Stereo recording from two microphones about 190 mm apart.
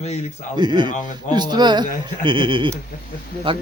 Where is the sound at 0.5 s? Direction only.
25° right (ahead or behind).